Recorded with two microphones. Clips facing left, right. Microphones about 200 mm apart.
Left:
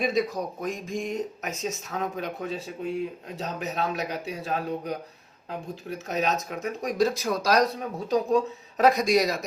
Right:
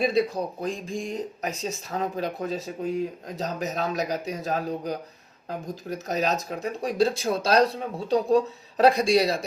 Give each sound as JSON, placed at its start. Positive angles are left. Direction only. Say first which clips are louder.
{"t": 0.0, "sound": "speech", "louder": "right 2 dB", "side_deg": -30}